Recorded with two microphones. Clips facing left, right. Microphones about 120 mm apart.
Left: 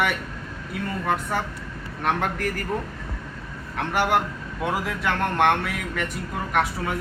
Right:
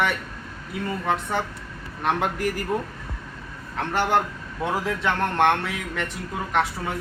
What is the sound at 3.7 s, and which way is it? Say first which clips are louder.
Speech: even; 10° left (ahead or behind).